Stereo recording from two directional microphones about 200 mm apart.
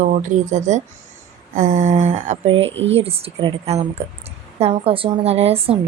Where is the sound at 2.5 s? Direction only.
65° right (ahead or behind).